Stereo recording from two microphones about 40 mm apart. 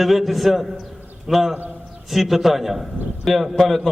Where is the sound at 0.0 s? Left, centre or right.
Centre.